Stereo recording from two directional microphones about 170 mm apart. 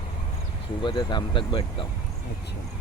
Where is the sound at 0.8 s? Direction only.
25° left (ahead or behind).